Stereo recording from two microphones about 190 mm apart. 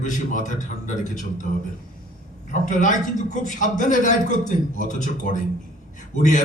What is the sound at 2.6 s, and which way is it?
A man's voice, 40° left (ahead or behind).